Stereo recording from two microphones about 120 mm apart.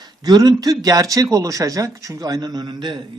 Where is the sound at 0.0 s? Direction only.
35° right (ahead or behind).